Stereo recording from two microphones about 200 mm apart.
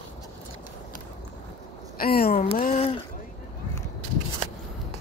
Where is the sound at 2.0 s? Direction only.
50° left (ahead or behind).